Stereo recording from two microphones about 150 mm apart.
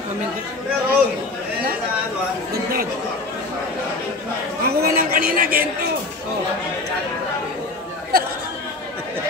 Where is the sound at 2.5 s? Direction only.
80° right.